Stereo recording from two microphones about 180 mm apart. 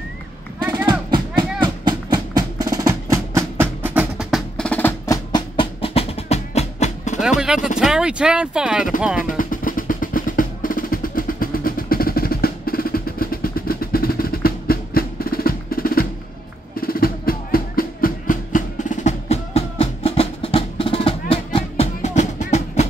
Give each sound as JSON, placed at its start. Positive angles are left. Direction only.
{"t": 0.7, "sound": "a sound", "side_deg": -20}
{"t": 1.6, "sound": "music", "side_deg": -25}
{"t": 7.2, "sound": "music", "side_deg": 0}
{"t": 7.8, "sound": "speech", "side_deg": -5}
{"t": 9.4, "sound": "percussion", "side_deg": 50}
{"t": 16.7, "sound": "music", "side_deg": 55}